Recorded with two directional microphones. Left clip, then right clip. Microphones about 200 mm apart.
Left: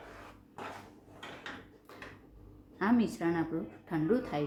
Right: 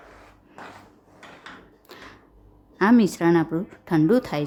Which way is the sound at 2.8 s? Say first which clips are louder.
Right 12 dB; 50° right (ahead or behind).